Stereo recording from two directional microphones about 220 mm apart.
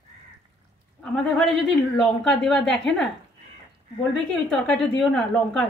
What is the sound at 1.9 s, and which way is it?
A woman's voice, centre (ahead or behind).